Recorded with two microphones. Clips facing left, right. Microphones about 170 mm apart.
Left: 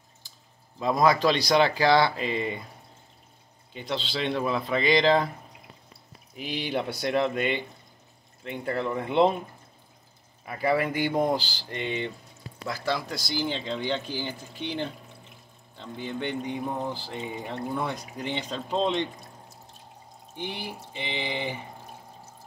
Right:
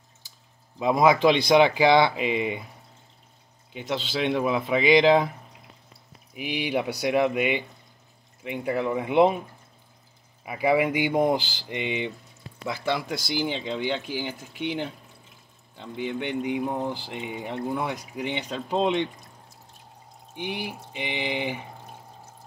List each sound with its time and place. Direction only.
0.7 s speech: 10° right (ahead or behind)
3.7 s speech: 10° right (ahead or behind)
6.3 s speech: 10° right (ahead or behind)
10.4 s speech: 15° right (ahead or behind)
20.3 s speech: 15° right (ahead or behind)